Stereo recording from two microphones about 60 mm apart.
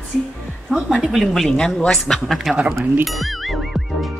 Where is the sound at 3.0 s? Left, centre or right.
Centre.